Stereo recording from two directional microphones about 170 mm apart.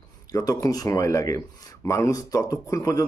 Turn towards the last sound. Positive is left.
turn(degrees=20)  # may be behind; listen again after turning